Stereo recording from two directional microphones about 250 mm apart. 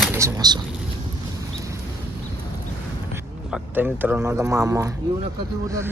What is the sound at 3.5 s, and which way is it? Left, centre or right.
Speech, centre.